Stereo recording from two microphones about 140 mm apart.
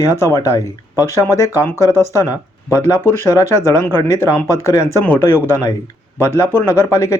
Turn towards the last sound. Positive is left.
turn(degrees=20)  # may be behind; listen again after turning